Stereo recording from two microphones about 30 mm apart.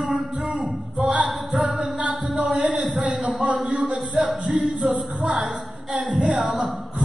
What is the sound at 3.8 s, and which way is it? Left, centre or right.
Speech, centre.